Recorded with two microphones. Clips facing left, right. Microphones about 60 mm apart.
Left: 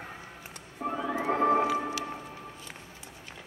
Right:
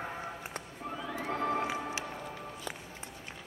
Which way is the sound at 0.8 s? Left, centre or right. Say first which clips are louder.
Left 8 dB; left.